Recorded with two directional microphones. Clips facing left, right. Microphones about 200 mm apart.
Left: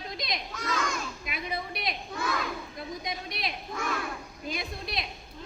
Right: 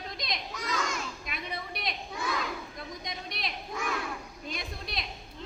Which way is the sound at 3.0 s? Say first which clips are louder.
Left 2 dB; centre (ahead or behind).